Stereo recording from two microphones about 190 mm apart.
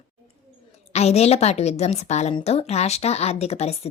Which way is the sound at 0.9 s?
35° left (ahead or behind).